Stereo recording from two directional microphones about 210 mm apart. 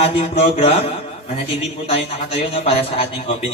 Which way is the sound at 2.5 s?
25° left (ahead or behind).